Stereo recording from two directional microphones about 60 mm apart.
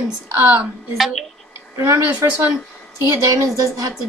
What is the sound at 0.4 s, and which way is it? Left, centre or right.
Speech, right.